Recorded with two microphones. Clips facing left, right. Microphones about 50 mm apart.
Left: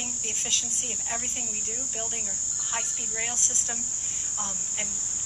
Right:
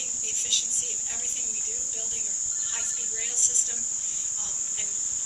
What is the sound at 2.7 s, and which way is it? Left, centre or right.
Speech, left.